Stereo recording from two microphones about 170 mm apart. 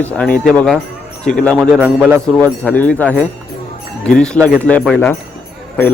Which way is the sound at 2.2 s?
5° left (ahead or behind).